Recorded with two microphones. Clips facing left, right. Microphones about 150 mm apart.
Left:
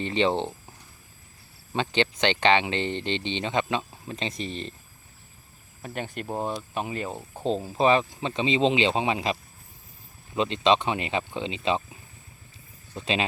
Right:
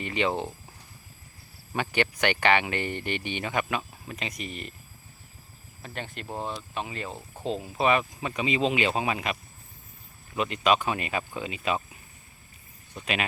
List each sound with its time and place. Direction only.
0.0 s speech: 30° left (ahead or behind)
1.7 s speech: 25° left (ahead or behind)
5.8 s speech: 10° left (ahead or behind)
7.3 s speech: 35° left (ahead or behind)